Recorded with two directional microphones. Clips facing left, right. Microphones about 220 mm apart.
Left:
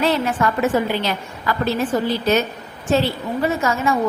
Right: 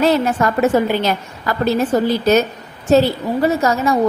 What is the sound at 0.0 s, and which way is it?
A woman's voice, 40° right (ahead or behind).